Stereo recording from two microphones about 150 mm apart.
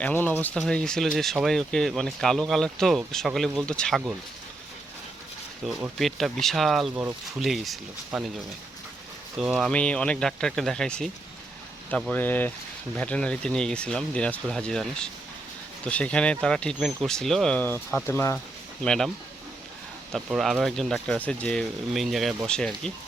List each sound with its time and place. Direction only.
0.0 s speech: 10° left (ahead or behind)
5.6 s speech: centre (ahead or behind)
9.4 s speech: centre (ahead or behind); by 18.3 s 15° left (ahead or behind)
18.8 s speech: 5° left (ahead or behind)
20.1 s speech: centre (ahead or behind)